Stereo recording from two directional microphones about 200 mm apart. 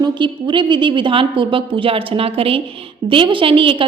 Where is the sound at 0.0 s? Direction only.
25° right (ahead or behind).